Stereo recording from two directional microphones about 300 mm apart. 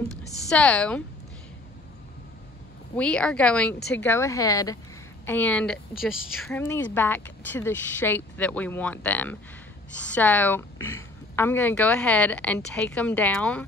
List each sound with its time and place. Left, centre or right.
0.5 s a woman's voice: centre
3.0 s a woman's voice: centre